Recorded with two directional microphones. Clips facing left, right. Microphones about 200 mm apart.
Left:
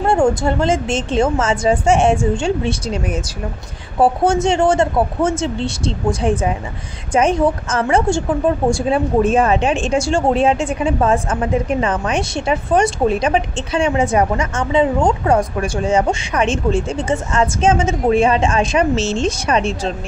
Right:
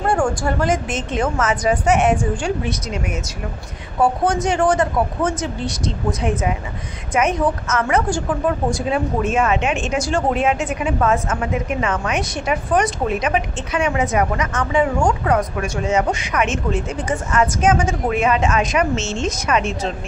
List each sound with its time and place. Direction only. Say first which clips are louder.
0.0 s a woman's voice: left 4 dB; 25° left (ahead or behind)